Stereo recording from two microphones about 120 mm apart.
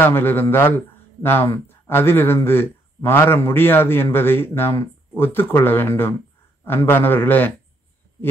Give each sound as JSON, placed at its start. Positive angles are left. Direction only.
{"t": 0.0, "sound": "speech", "side_deg": 15}